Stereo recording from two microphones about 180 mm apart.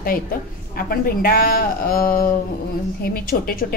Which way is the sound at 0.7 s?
55° left (ahead or behind).